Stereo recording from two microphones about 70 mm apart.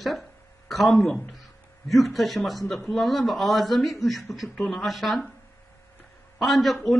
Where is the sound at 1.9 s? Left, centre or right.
Centre.